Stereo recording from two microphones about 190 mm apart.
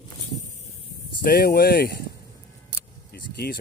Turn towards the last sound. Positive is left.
turn(degrees=55)  # may be behind; listen again after turning